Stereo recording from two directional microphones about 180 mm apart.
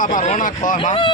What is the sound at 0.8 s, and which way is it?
Speech, 25° left (ahead or behind).